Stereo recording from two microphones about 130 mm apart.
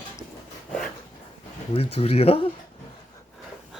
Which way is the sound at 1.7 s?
50° left (ahead or behind).